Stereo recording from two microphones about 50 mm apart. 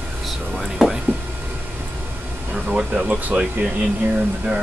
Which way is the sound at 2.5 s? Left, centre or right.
Right.